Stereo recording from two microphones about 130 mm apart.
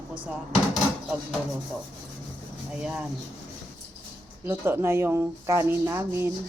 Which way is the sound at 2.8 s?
5° right (ahead or behind).